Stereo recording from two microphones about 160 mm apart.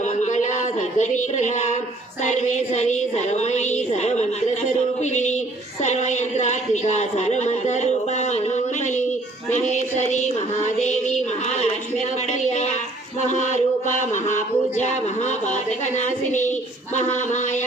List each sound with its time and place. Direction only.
0.3 s a sound: 50° left (ahead or behind)
2.2 s speech: 50° left (ahead or behind)
14.1 s speech: 50° left (ahead or behind)